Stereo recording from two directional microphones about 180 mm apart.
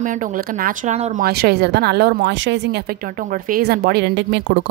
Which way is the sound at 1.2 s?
65° right (ahead or behind).